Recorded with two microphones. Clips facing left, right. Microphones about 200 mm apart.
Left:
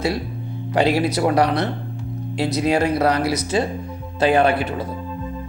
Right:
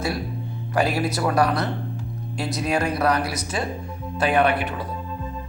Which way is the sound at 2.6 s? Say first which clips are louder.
Left 4 dB; 25° left (ahead or behind).